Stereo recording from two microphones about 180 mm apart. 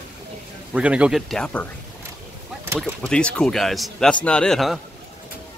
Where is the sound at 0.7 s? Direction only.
5° right (ahead or behind).